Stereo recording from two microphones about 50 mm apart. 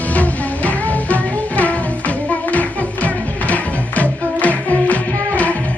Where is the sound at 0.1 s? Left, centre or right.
Left.